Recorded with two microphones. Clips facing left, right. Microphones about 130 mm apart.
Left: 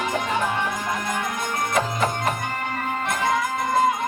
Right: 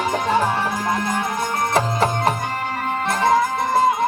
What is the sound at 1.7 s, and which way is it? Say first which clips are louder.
Music: right 3 dB; 35° right (ahead or behind).